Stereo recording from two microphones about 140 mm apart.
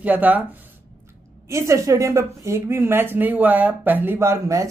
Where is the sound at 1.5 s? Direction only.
20° right (ahead or behind).